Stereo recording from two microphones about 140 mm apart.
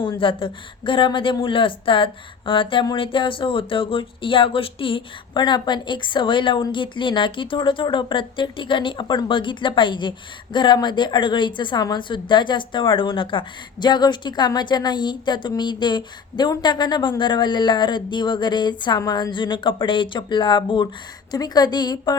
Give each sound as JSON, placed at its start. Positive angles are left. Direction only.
{"t": 0.2, "sound": "a woman's voice", "side_deg": 40}